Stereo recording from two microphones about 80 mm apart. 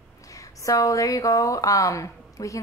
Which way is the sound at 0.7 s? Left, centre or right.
Left.